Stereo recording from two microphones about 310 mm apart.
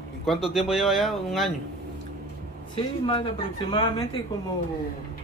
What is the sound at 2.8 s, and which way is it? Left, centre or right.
Speech, centre.